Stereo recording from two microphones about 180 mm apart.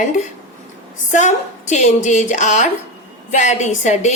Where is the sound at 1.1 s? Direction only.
40° left (ahead or behind).